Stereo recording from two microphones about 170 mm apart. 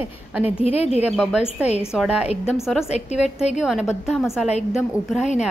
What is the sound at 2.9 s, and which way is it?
Speech, 40° left (ahead or behind).